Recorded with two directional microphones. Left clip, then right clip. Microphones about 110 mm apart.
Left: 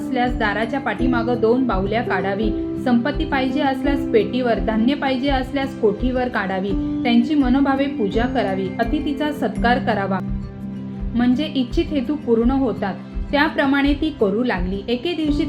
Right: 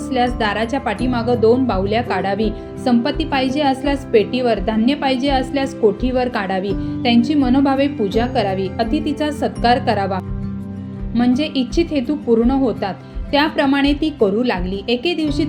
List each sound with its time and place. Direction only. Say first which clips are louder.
0.1 s a woman's voice: right 3 dB; 35° right (ahead or behind)